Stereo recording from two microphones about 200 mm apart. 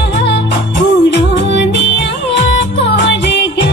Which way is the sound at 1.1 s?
60° left (ahead or behind).